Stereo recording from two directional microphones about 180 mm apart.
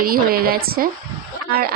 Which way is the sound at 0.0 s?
55° right (ahead or behind).